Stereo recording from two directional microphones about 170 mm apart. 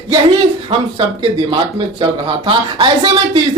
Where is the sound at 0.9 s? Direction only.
30° right (ahead or behind).